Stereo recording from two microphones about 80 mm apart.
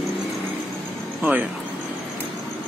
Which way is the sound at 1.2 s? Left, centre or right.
Right.